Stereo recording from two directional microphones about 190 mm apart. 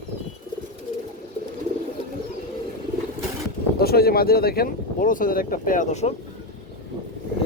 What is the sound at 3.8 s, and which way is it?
Speech, 55° left (ahead or behind).